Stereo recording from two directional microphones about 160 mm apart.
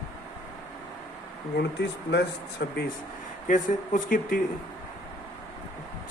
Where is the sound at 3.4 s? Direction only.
55° left (ahead or behind).